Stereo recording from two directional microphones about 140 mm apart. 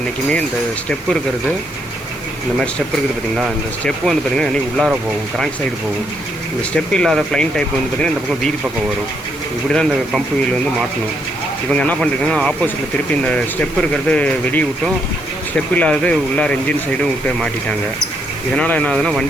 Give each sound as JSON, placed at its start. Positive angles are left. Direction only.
{"t": 3.3, "sound": "speech", "side_deg": 0}
{"t": 6.6, "sound": "speech", "side_deg": 5}
{"t": 10.1, "sound": "speech", "side_deg": 0}
{"t": 11.7, "sound": "speech", "side_deg": 10}
{"t": 13.9, "sound": "speech", "side_deg": 10}
{"t": 18.5, "sound": "speech", "side_deg": 10}